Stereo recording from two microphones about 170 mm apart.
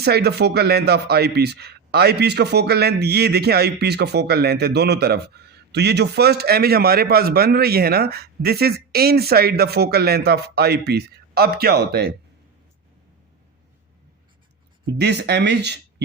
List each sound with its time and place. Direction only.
0.0 s speech: 70° right (ahead or behind)
14.9 s speech: 80° right